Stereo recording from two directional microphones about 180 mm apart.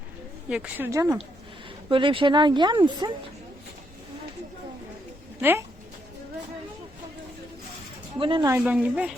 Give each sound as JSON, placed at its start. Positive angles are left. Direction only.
{"t": 0.5, "sound": "speech", "side_deg": -5}
{"t": 0.9, "sound": "a woman's voice", "side_deg": -15}
{"t": 1.9, "sound": "speech", "side_deg": -30}
{"t": 5.4, "sound": "speech", "side_deg": -10}
{"t": 8.2, "sound": "speech", "side_deg": -30}
{"t": 8.4, "sound": "a woman's voice", "side_deg": -10}